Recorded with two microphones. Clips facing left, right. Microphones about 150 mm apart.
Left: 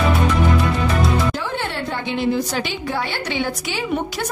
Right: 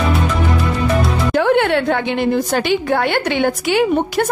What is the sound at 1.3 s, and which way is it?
A woman's voice, 65° right (ahead or behind).